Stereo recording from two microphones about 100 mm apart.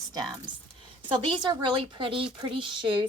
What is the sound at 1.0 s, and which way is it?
A woman's voice, 55° right (ahead or behind).